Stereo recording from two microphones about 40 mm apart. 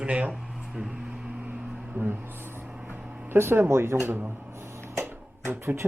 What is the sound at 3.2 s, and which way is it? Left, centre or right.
Speech, right.